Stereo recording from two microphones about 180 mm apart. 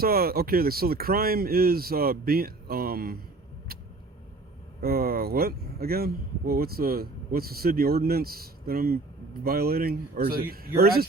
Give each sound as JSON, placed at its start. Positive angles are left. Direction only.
{"t": 0.0, "sound": "speech", "side_deg": -55}
{"t": 3.7, "sound": "vehicle", "side_deg": -55}
{"t": 4.8, "sound": "speech", "side_deg": -55}